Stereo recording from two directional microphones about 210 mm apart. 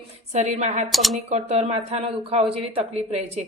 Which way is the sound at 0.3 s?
35° right (ahead or behind).